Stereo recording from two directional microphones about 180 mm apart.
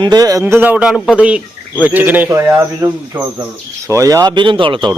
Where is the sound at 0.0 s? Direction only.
20° right (ahead or behind).